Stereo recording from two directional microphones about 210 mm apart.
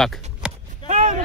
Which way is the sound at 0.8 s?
35° right (ahead or behind).